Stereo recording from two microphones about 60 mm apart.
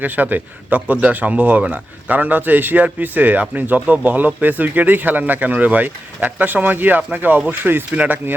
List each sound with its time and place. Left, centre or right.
0.0 s speech: right